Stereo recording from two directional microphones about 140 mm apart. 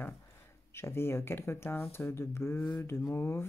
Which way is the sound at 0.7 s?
15° left (ahead or behind).